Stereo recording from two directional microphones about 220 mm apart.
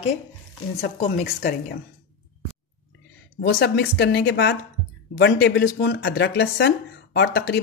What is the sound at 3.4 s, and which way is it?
Speech, 50° left (ahead or behind).